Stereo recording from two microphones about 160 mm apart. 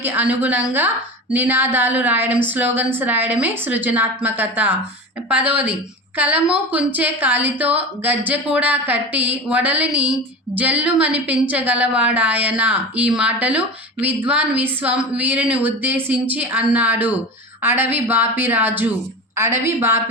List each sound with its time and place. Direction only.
0.0 s a woman's voice: 10° right (ahead or behind)